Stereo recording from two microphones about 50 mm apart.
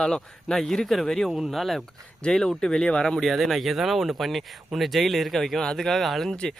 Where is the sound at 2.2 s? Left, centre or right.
Centre.